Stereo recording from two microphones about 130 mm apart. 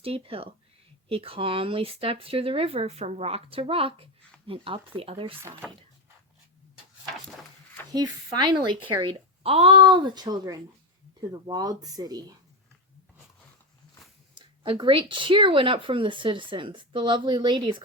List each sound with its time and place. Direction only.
0.0 s speech: 45° right (ahead or behind)
7.9 s speech: 35° right (ahead or behind)
9.4 s speech: 50° right (ahead or behind)
9.8 s speech: 35° right (ahead or behind)
14.3 s speech: 35° right (ahead or behind)